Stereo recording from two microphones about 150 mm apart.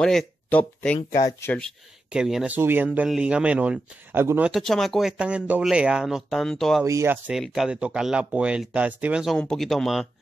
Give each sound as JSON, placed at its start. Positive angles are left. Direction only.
{"t": 0.0, "sound": "speech", "side_deg": 5}
{"t": 2.0, "sound": "speech", "side_deg": -5}
{"t": 4.5, "sound": "speech", "side_deg": 0}
{"t": 6.8, "sound": "speech", "side_deg": -20}
{"t": 7.2, "sound": "speech", "side_deg": 0}